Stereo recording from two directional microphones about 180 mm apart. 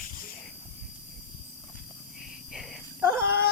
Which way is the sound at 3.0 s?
15° right (ahead or behind).